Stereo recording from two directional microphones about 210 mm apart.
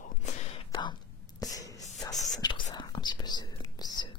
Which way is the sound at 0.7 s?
20° left (ahead or behind).